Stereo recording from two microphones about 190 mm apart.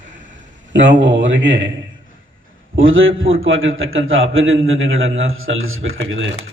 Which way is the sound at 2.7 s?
90° right.